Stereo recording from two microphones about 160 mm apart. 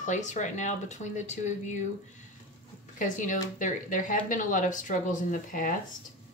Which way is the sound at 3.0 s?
55° left (ahead or behind).